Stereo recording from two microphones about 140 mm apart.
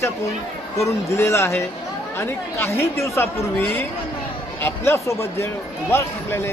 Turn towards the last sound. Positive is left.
turn(degrees=15)  # may be behind; listen again after turning